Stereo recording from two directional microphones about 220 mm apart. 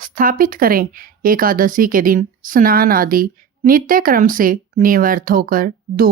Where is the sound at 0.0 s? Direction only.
40° right (ahead or behind).